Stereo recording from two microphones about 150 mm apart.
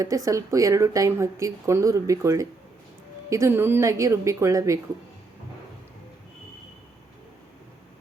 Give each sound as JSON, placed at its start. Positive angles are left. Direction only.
{"t": 0.0, "sound": "speech", "side_deg": -20}